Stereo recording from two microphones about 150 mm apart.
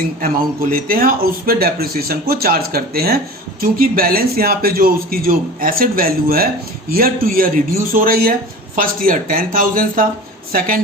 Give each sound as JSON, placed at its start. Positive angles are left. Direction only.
{"t": 0.7, "sound": "speech", "side_deg": -75}
{"t": 3.6, "sound": "a man's voice", "side_deg": -75}